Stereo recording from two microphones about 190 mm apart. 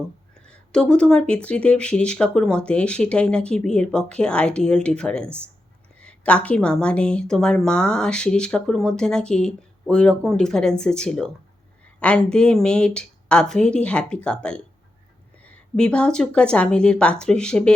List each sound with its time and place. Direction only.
0.4 s speech: 5° left (ahead or behind)